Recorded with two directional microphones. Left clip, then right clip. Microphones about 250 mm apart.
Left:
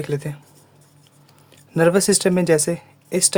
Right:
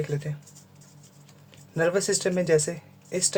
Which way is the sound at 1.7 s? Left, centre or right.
Left.